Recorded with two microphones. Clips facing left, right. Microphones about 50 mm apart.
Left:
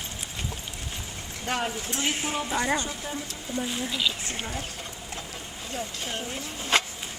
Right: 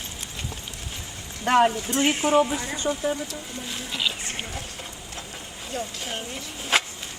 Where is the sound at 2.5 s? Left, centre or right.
Left.